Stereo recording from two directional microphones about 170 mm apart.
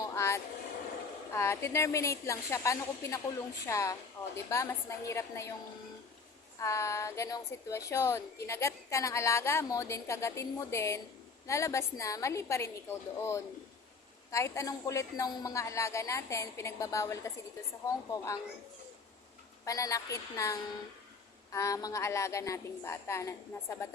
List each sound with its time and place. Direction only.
0.0 s vehicle: 20° left (ahead or behind)
1.3 s a woman's voice: 15° left (ahead or behind)
6.6 s a woman's voice: 15° left (ahead or behind)
19.6 s a woman's voice: 20° left (ahead or behind)